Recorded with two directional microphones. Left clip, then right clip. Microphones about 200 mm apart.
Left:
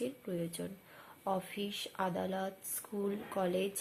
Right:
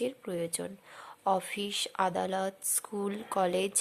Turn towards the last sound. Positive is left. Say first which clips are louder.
# right 6 dB
turn(degrees=-45)  # may be behind; listen again after turning